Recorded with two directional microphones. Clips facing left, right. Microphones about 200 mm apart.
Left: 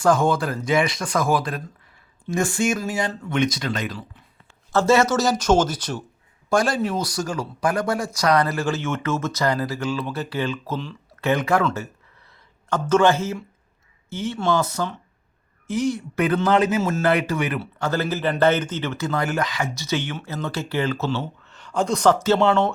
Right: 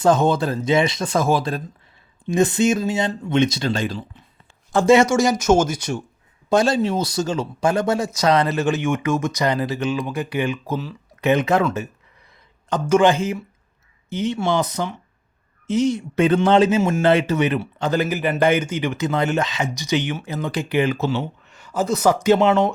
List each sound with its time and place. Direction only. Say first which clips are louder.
0.0 s speech: right 2 dB; 20° right (ahead or behind)
4.7 s speech: right 3 dB; 15° right (ahead or behind)
6.5 s speech: right 3 dB; 25° right (ahead or behind)